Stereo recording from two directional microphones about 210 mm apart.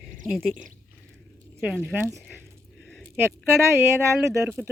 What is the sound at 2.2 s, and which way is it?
Speech, 5° left (ahead or behind).